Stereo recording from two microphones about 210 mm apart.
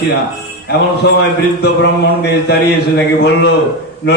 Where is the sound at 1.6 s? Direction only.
55° left (ahead or behind).